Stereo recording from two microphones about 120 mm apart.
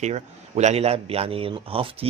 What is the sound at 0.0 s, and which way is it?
A man's voice, 70° right (ahead or behind).